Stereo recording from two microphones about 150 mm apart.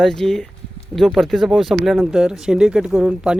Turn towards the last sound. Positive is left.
turn(degrees=-5)  # may be behind; listen again after turning